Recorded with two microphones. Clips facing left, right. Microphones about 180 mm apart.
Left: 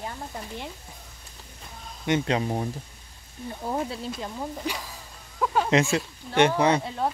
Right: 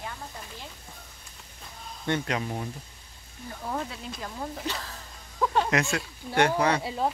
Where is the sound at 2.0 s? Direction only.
20° left (ahead or behind).